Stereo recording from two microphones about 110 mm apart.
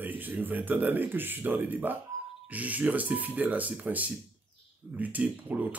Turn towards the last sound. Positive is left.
turn(degrees=-15)  # may be behind; listen again after turning